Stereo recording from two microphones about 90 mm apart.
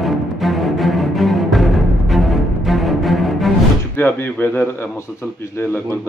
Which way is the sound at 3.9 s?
25° left (ahead or behind).